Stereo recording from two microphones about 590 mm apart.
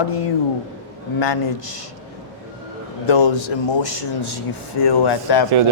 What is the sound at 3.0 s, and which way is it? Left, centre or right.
Speech, left.